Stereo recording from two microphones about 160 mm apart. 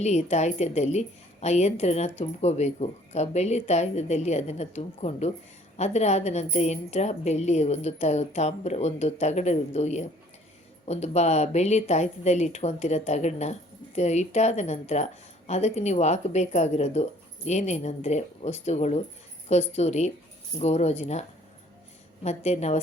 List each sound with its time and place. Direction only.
0.0 s a woman's voice: 45° left (ahead or behind)